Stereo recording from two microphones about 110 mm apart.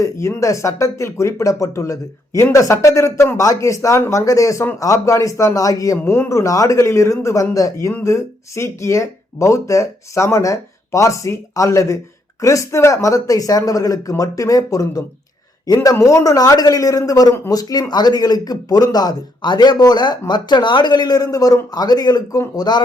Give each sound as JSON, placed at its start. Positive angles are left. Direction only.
{"t": 0.0, "sound": "a man's voice", "side_deg": 25}